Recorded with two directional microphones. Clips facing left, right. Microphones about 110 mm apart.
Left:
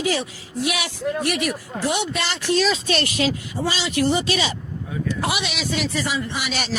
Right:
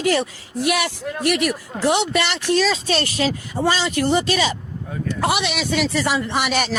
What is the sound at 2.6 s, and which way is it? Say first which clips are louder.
Speech: even; 35° right (ahead or behind).